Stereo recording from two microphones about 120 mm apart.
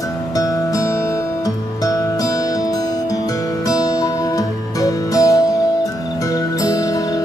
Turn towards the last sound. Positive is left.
turn(degrees=30)  # may be behind; listen again after turning